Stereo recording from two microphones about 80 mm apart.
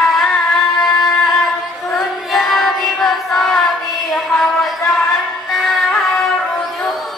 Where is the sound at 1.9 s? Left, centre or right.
Centre.